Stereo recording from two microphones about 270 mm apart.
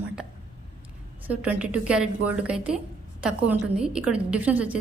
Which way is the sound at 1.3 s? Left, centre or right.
Centre.